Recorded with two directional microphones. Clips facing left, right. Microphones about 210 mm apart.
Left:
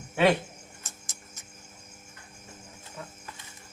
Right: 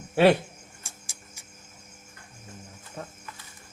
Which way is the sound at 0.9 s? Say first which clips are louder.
Even; 10° right (ahead or behind).